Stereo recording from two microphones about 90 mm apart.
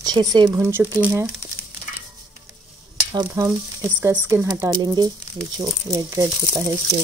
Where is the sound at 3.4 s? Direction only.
35° right (ahead or behind).